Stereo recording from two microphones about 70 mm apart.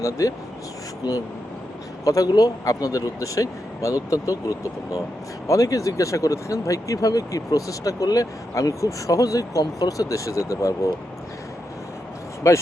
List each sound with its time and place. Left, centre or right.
0.0 s speech: left
2.0 s speech: left
12.4 s speech: left